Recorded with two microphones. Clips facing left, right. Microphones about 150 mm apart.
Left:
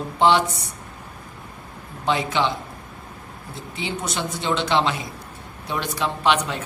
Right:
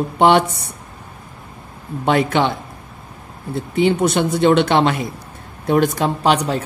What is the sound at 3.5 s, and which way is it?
A man's voice, 60° right (ahead or behind).